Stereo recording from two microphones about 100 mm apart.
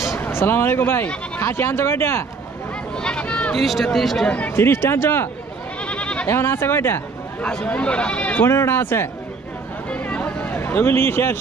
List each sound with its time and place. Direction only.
0.0 s speech: 25° left (ahead or behind)
3.0 s a sound: 10° left (ahead or behind)
3.6 s speech: centre (ahead or behind)
4.3 s speech: 20° left (ahead or behind)
5.9 s goat: 10° left (ahead or behind)
6.2 s speech: 25° left (ahead or behind)
7.4 s speech: 10° left (ahead or behind)
8.5 s speech: 25° left (ahead or behind)
9.8 s a sound: 15° left (ahead or behind)